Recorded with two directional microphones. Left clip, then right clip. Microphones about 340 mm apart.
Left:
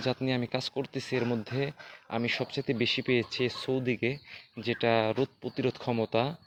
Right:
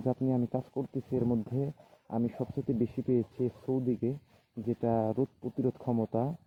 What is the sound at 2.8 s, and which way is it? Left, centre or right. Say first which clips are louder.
Speech: left 4 dB; centre.